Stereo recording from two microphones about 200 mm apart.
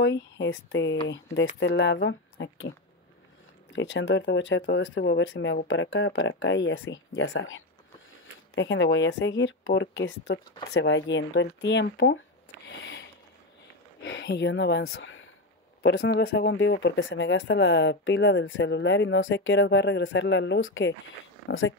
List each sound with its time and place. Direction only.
0.0 s speech: 60° left (ahead or behind)
3.7 s speech: 65° left (ahead or behind)
14.0 s speech: 60° left (ahead or behind)
15.8 s speech: 60° left (ahead or behind); by 21.7 s 75° left (ahead or behind)